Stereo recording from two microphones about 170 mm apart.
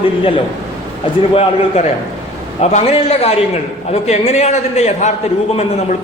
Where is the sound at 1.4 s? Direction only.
40° left (ahead or behind).